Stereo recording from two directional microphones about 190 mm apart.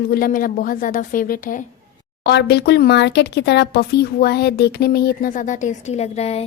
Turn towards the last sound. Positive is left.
turn(degrees=35)  # may be behind; listen again after turning